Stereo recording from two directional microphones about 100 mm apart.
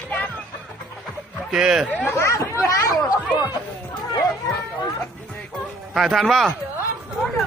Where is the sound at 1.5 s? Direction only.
5° right (ahead or behind).